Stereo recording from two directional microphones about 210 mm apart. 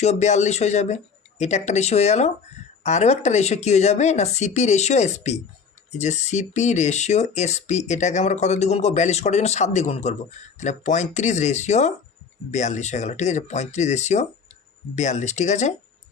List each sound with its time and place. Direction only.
0.0 s speech: 30° left (ahead or behind)